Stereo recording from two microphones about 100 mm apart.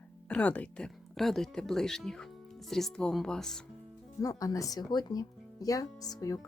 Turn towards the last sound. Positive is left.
turn(degrees=35)  # may be behind; listen again after turning